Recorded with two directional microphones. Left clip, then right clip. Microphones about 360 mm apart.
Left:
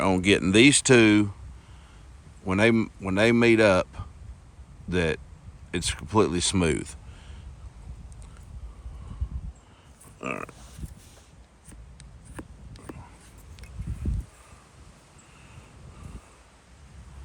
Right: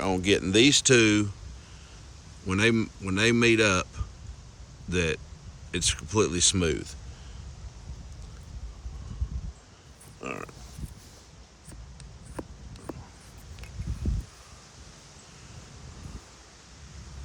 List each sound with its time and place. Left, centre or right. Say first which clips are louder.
0.0 s speech: left 3 dB; left
2.5 s speech: left 3 dB; centre
10.2 s pig: left 3 dB; left
12.4 s a sound: right 3 dB; centre